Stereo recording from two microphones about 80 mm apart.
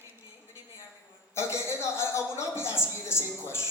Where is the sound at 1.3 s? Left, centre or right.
Left.